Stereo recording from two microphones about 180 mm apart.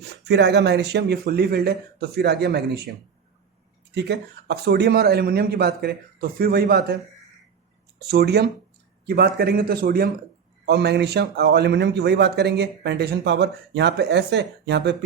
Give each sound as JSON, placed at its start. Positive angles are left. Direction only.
{"t": 0.3, "sound": "speech", "side_deg": -70}
{"t": 3.9, "sound": "speech", "side_deg": -70}
{"t": 8.0, "sound": "speech", "side_deg": -60}
{"t": 10.7, "sound": "a man's voice", "side_deg": -65}